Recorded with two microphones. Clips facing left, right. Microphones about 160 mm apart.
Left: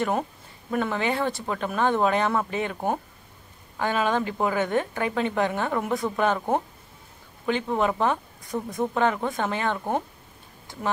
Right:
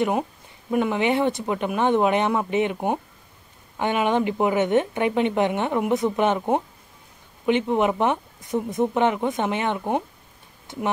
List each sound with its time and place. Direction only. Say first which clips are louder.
0.7 s a woman's voice: right 4 dB; 15° right (ahead or behind)